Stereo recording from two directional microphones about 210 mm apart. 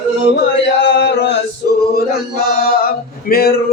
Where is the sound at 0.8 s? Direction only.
55° left (ahead or behind).